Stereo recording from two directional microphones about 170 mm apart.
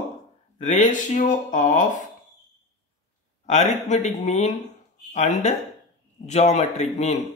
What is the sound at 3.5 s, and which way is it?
Speech, 45° left (ahead or behind).